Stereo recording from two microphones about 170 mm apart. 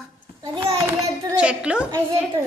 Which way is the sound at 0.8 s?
5° right (ahead or behind).